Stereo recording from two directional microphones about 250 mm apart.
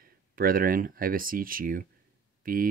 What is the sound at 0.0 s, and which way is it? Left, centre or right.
Speech, right.